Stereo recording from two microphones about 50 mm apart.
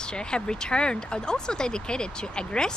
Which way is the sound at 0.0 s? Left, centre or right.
Centre.